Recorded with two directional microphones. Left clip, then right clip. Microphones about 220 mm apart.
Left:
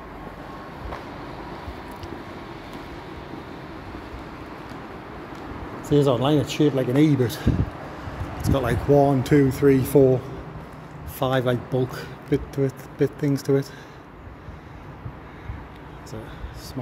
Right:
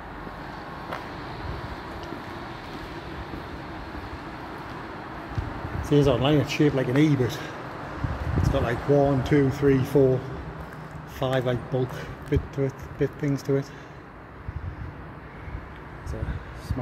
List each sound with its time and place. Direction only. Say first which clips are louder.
5.9 s speech: left 2 dB; 10° right (ahead or behind)
6.1 s speech: left 1 dB; 20° left (ahead or behind)
11.1 s speech: left 3 dB; 30° left (ahead or behind)